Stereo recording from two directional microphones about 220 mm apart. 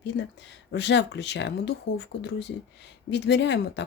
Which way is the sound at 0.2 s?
50° left (ahead or behind).